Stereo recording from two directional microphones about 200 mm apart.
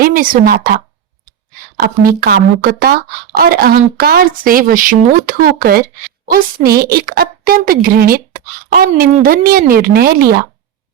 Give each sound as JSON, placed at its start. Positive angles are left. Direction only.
{"t": 0.0, "sound": "speech", "side_deg": -45}
{"t": 2.0, "sound": "speech", "side_deg": -45}